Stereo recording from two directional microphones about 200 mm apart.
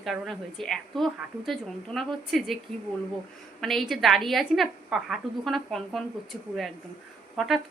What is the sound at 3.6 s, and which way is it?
A woman's voice, centre (ahead or behind).